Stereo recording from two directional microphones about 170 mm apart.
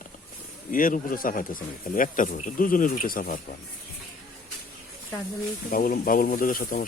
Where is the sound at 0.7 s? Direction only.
55° left (ahead or behind).